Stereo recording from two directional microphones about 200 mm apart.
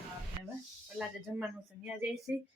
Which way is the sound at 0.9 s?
5° right (ahead or behind).